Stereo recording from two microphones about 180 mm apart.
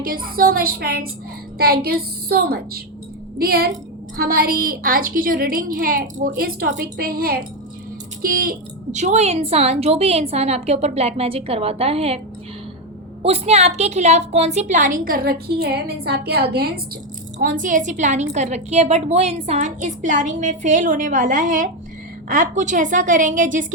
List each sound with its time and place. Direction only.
0.0 s a woman's voice: 55° right (ahead or behind); by 12.2 s 35° right (ahead or behind)
13.2 s a woman's voice: 35° right (ahead or behind); by 16.8 s 60° right (ahead or behind)
17.6 s a woman's voice: 45° right (ahead or behind)